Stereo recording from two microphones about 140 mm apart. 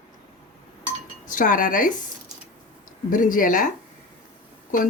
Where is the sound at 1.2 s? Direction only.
70° left (ahead or behind).